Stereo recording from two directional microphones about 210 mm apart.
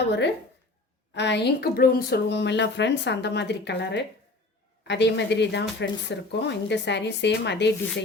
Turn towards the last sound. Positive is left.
turn(degrees=55)  # may be behind; listen again after turning